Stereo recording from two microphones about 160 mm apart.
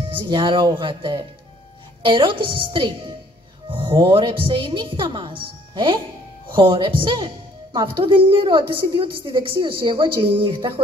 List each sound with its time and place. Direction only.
0.1 s a woman's voice: 30° right (ahead or behind)